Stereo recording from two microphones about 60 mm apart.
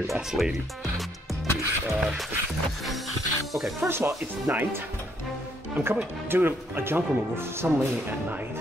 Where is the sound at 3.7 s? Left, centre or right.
Right.